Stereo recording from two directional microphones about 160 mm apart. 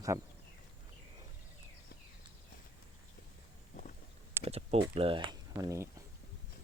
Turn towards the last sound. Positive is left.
turn(degrees=-20)  # may be behind; listen again after turning